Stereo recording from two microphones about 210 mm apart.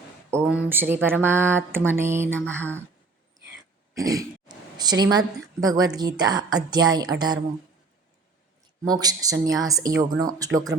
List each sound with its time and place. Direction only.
0.3 s speech: 10° right (ahead or behind)
3.9 s a woman's voice: 15° right (ahead or behind)
8.8 s speech: 20° right (ahead or behind)